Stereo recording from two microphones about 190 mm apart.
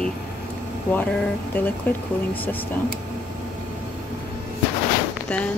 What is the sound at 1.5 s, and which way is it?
Speech, 10° left (ahead or behind).